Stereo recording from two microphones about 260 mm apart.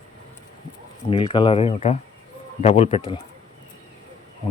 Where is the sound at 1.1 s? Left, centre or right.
Left.